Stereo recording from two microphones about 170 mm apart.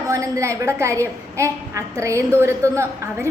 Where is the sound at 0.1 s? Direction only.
15° right (ahead or behind).